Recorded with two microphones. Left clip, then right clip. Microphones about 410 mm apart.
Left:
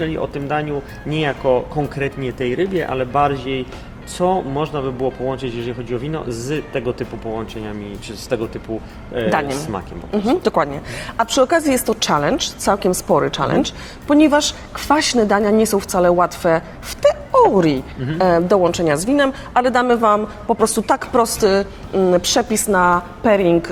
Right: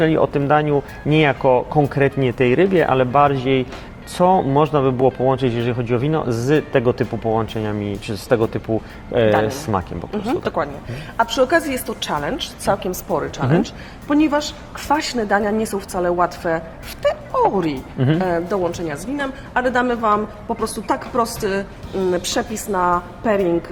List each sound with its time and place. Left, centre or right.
0.0 s speech: right
10.1 s a woman's voice: left
21.4 s a woman's voice: left